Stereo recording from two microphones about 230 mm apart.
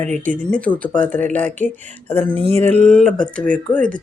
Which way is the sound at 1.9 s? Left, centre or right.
Centre.